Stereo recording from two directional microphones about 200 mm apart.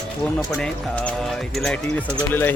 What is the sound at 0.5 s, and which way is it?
Speech, 5° left (ahead or behind).